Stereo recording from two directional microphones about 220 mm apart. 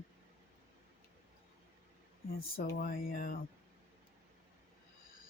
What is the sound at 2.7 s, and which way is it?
Speech, 40° left (ahead or behind).